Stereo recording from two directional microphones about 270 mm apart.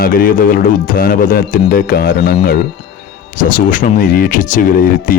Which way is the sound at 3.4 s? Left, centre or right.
Left.